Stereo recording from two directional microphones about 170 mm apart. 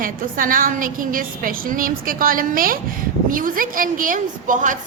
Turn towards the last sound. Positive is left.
turn(degrees=-50)  # may be behind; listen again after turning